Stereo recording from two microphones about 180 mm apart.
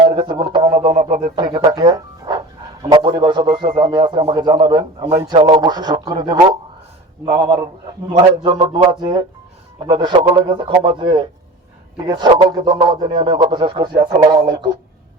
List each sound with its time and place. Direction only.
0.0 s a sound: 25° right (ahead or behind)
0.9 s a man's voice: 45° right (ahead or behind)
1.4 s a man's voice: 25° right (ahead or behind)